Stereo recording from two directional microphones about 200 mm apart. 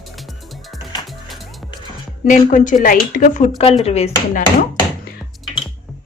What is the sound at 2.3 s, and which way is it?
Speech, 40° left (ahead or behind).